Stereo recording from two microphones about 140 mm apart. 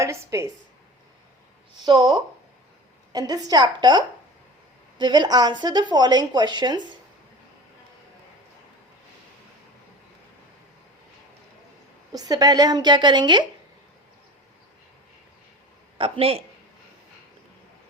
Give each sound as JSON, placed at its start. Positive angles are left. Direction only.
{"t": 0.0, "sound": "speech", "side_deg": -20}
{"t": 1.8, "sound": "a woman's voice", "side_deg": -30}
{"t": 12.1, "sound": "a woman's voice", "side_deg": -25}
{"t": 16.0, "sound": "speech", "side_deg": -40}